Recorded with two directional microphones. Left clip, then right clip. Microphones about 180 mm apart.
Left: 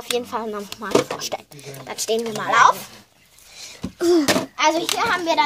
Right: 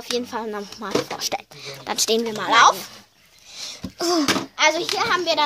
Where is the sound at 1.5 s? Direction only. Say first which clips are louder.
Right 4 dB; 35° right (ahead or behind).